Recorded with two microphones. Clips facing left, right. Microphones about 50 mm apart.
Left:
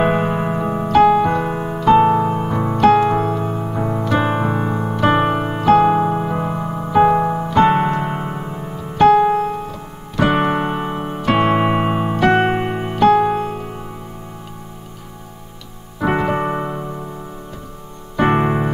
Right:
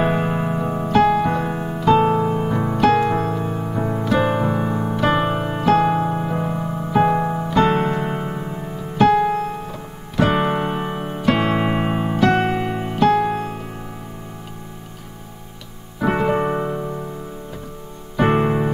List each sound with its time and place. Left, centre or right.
0.0 s keyboard: centre
2.0 s music: centre
4.6 s electric piano: centre
5.0 s electric piano: centre
5.5 s music: centre
7.5 s piano: centre
9.0 s music: centre
9.7 s music: centre
10.3 s electric piano: centre
11.4 s music: centre
12.3 s music: left; by 13.7 s centre
16.1 s keyboard: centre
18.1 s music: centre